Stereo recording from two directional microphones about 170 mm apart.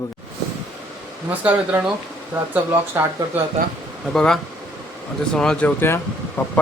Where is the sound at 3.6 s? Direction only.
45° right (ahead or behind).